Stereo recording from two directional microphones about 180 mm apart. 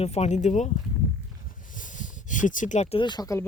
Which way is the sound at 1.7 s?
45° left (ahead or behind).